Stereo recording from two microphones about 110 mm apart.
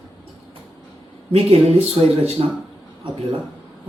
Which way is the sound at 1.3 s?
60° right (ahead or behind).